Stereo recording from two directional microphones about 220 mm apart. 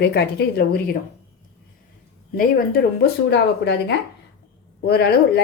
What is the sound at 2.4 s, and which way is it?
Speech, 45° left (ahead or behind).